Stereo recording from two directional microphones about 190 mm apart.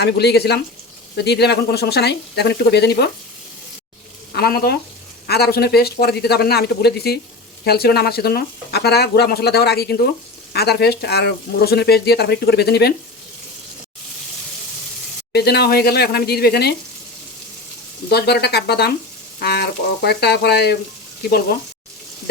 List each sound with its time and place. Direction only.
0.0 s speech: 60° left (ahead or behind)
4.4 s speech: 55° left (ahead or behind)
15.3 s speech: 60° left (ahead or behind)
18.1 s speech: 60° left (ahead or behind)